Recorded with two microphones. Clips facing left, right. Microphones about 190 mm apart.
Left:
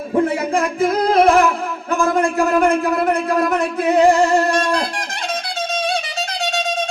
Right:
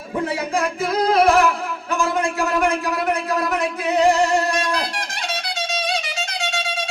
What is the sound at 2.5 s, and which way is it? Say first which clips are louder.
Speech: left 5 dB; 55° left (ahead or behind).